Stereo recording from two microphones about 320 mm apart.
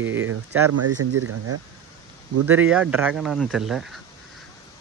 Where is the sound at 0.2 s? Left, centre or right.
Right.